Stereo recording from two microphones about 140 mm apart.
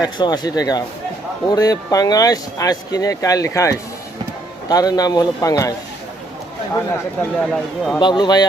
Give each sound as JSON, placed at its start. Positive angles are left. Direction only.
{"t": 0.0, "sound": "speech", "side_deg": 30}
{"t": 7.3, "sound": "speech", "side_deg": 0}
{"t": 7.9, "sound": "speech", "side_deg": 30}